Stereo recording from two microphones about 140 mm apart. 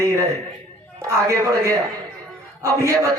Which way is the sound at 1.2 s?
20° right (ahead or behind).